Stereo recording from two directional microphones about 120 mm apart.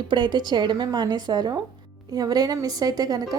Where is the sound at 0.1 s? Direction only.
40° right (ahead or behind).